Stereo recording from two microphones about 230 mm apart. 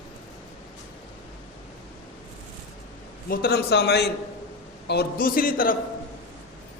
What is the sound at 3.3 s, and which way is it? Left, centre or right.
A man's voice, left.